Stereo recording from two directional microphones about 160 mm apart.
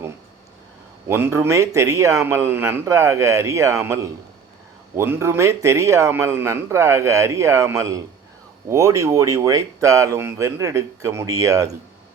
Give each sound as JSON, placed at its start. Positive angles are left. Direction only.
{"t": 1.0, "sound": "a man's voice", "side_deg": -15}